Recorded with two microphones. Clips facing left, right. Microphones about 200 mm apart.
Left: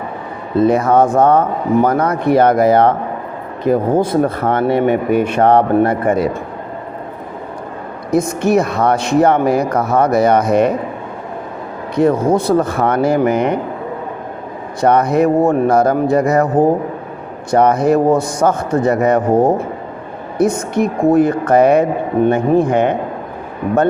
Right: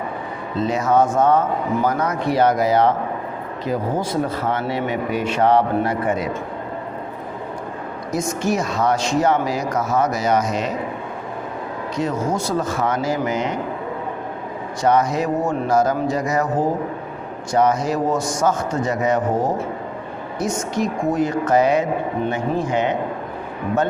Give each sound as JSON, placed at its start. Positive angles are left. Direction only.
{"t": 0.5, "sound": "speech", "side_deg": 55}
{"t": 8.1, "sound": "speech", "side_deg": 60}
{"t": 11.9, "sound": "speech", "side_deg": 60}
{"t": 14.8, "sound": "speech", "side_deg": 60}